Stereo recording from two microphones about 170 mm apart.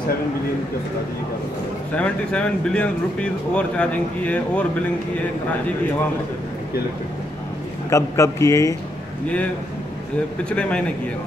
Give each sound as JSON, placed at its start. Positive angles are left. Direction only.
{"t": 2.0, "sound": "speech", "side_deg": 5}
{"t": 7.9, "sound": "speech", "side_deg": 20}
{"t": 10.5, "sound": "speech", "side_deg": 5}